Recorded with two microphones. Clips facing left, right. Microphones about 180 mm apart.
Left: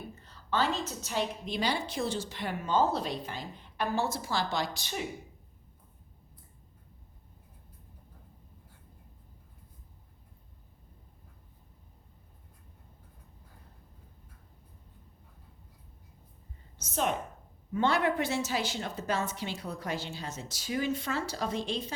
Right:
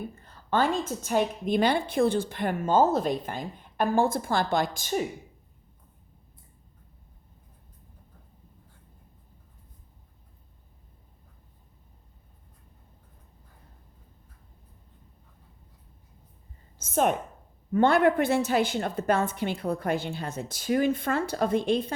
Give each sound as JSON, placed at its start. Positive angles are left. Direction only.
{"t": 0.2, "sound": "a woman's voice", "side_deg": -50}
{"t": 16.8, "sound": "a woman's voice", "side_deg": -50}